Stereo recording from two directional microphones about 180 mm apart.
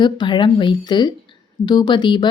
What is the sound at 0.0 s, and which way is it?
A woman's voice, 25° left (ahead or behind).